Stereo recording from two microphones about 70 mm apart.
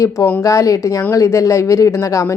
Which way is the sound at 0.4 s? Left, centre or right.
Left.